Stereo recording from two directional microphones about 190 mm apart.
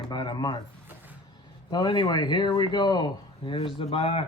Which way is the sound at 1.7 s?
25° left (ahead or behind).